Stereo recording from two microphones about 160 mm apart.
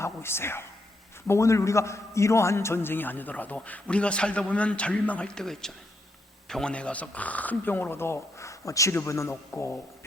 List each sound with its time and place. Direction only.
0.0 s a man's voice: 15° left (ahead or behind)